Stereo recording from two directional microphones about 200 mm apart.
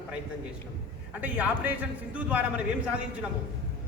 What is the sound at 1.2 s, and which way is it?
A man's voice, 5° right (ahead or behind).